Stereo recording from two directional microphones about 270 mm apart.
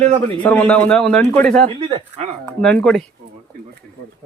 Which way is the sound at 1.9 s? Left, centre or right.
Right.